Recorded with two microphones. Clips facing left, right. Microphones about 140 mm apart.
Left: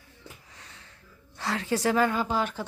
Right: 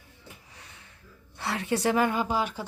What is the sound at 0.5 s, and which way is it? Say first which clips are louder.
Wheeze: even; 15° right (ahead or behind).